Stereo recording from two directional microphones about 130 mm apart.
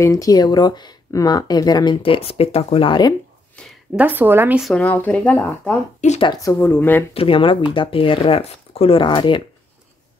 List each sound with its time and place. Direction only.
0.0 s speech: 25° left (ahead or behind)
2.0 s speech: 45° left (ahead or behind)
3.9 s speech: 15° right (ahead or behind)
4.7 s speech: 15° left (ahead or behind)
5.9 s speech: 65° left (ahead or behind)
6.2 s speech: 30° left (ahead or behind)
6.5 s speech: 15° left (ahead or behind)
7.2 s speech: 45° left (ahead or behind)